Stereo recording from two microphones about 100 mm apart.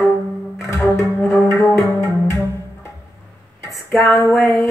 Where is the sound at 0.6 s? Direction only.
30° left (ahead or behind).